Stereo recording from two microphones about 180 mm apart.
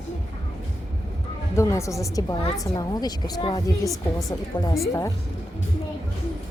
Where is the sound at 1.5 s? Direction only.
15° left (ahead or behind).